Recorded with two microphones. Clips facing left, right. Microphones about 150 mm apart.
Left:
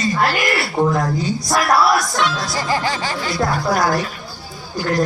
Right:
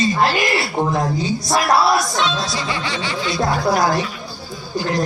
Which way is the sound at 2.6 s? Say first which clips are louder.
Left 4 dB; 40° left (ahead or behind).